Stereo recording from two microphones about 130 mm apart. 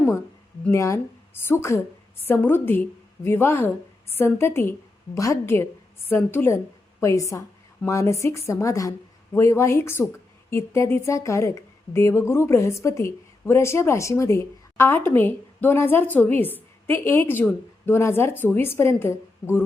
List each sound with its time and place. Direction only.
0.7 s a woman's voice: 20° left (ahead or behind)